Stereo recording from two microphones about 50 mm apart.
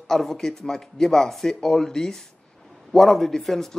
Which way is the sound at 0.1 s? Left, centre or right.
Centre.